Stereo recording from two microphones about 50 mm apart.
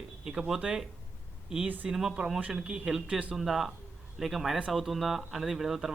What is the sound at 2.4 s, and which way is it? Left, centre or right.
Speech, right.